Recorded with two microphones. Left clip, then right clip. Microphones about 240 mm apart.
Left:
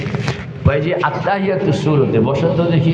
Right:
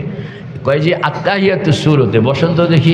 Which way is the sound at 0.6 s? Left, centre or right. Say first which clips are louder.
Right 3 dB; right.